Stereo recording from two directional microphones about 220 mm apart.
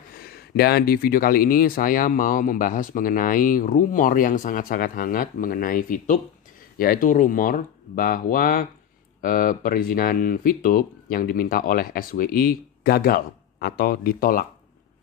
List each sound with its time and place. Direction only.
0.2 s speech: 45° left (ahead or behind)